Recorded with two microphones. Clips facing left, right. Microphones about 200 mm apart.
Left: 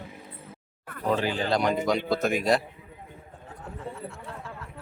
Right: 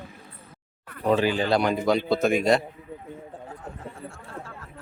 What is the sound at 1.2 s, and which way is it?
Speech, 85° right.